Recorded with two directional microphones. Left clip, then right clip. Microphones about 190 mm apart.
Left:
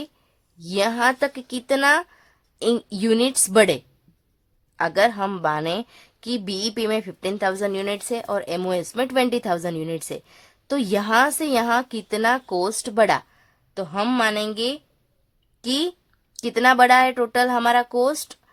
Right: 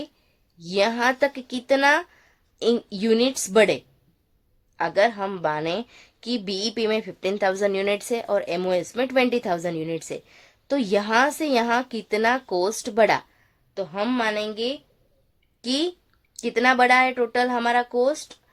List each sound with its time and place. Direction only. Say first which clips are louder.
0.6 s a woman's voice: left 1 dB; 25° left (ahead or behind)
4.8 s a woman's voice: left 2 dB; 35° left (ahead or behind)
13.7 s a woman's voice: left 3 dB; 40° left (ahead or behind)